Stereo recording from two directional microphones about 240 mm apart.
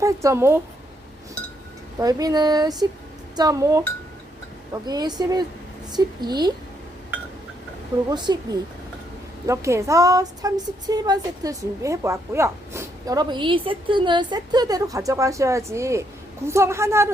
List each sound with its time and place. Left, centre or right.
0.0 s a woman's voice: centre
2.0 s a woman's voice: centre
8.1 s a woman's voice: centre